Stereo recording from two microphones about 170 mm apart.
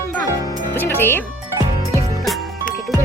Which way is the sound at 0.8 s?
10° left (ahead or behind).